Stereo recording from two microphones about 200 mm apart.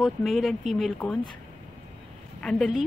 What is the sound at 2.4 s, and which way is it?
Speech, 5° left (ahead or behind).